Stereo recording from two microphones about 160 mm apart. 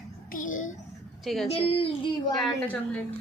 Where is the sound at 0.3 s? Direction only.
55° left (ahead or behind).